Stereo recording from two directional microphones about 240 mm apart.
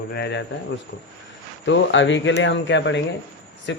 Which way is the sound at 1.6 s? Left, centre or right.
Left.